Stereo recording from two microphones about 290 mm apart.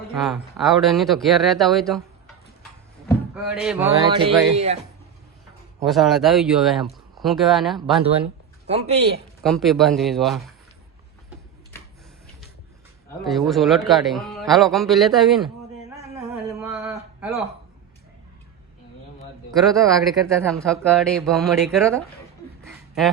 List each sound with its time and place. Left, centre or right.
0.2 s a man's voice: centre
3.3 s speech: centre; by 4.8 s right
5.8 s a man's voice: centre
8.6 s a man's voice: right
9.4 s a man's voice: centre
13.1 s a man's voice: centre
16.1 s a sound: centre
19.5 s a man's voice: centre
22.6 s a sound: centre